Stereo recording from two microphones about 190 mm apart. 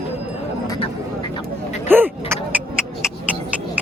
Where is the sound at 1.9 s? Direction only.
10° right (ahead or behind).